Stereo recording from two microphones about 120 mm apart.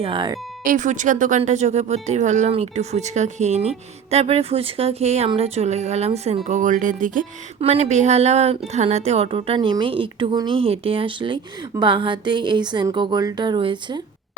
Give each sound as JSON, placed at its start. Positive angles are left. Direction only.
{"t": 0.0, "sound": "speech", "side_deg": -40}
{"t": 0.6, "sound": "speech", "side_deg": -90}
{"t": 2.5, "sound": "speech", "side_deg": -65}
{"t": 7.6, "sound": "speech", "side_deg": -60}